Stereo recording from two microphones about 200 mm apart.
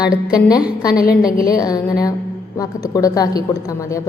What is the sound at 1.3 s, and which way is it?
A woman's voice, 20° left (ahead or behind).